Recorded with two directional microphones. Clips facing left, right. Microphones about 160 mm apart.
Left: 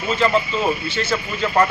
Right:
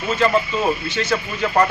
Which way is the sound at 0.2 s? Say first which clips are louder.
Right 1 dB; 10° right (ahead or behind).